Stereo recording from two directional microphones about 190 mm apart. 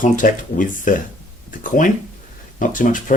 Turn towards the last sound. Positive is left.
turn(degrees=45)  # may be behind; listen again after turning